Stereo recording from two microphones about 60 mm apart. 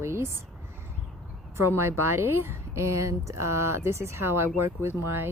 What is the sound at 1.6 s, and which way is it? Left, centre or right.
A woman's voice, right.